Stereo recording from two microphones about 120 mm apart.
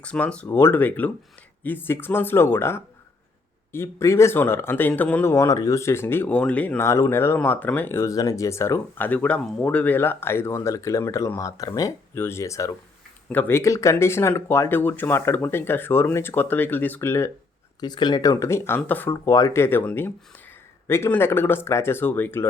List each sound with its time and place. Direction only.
0.0 s speech: 10° left (ahead or behind)
17.7 s speech: 35° left (ahead or behind); by 22.4 s 15° left (ahead or behind)